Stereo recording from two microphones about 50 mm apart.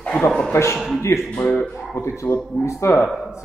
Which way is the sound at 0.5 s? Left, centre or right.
Left.